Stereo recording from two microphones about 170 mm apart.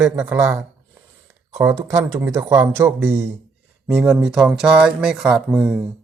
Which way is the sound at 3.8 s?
5° right (ahead or behind).